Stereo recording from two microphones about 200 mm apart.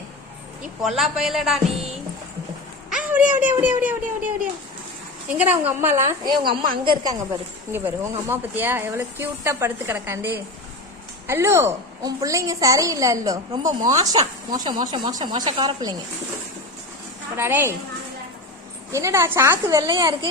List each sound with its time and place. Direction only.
0.8 s speech: centre (ahead or behind)
2.9 s a sound: 5° right (ahead or behind)
3.3 s a woman's voice: 10° right (ahead or behind)
5.4 s a woman's voice: 10° right (ahead or behind)
17.3 s a woman's voice: 10° right (ahead or behind)
18.9 s a woman's voice: 15° right (ahead or behind)